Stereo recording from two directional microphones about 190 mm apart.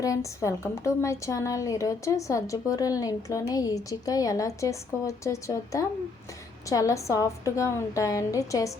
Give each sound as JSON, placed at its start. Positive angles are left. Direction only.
{"t": 0.0, "sound": "a woman's voice", "side_deg": 15}